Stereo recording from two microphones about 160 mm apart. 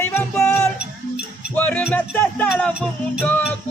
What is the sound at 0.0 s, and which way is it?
Music, 15° left (ahead or behind).